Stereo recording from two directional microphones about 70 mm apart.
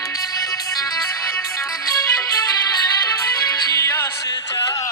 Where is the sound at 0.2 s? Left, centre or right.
Left.